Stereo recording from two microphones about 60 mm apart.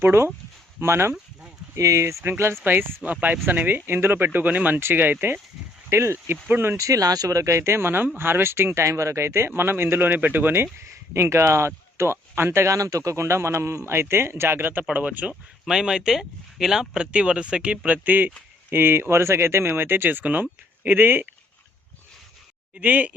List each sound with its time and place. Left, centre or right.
0.0 s speech: right
1.7 s speech: right
2.6 s speech: right
5.9 s speech: right
6.3 s speech: right
6.7 s speech: right
11.1 s speech: right
12.7 s speech: right
15.6 s speech: centre; by 21.2 s right
22.8 s speech: right